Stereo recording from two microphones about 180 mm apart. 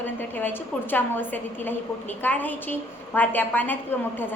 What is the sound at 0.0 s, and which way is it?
A woman's voice, 10° left (ahead or behind).